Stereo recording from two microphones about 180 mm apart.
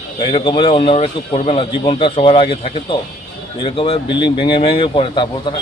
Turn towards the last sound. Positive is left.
turn(degrees=25)  # may be behind; listen again after turning